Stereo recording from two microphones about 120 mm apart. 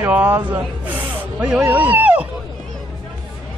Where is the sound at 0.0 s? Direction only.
15° right (ahead or behind).